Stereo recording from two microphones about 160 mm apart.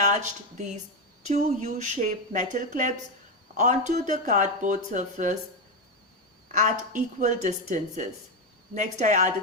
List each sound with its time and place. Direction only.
0.0 s speech: 50° right (ahead or behind)
6.5 s speech: 50° right (ahead or behind)